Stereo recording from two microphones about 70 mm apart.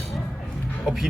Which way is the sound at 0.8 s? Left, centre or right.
Centre.